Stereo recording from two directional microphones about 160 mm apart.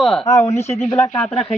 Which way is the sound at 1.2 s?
5° left (ahead or behind).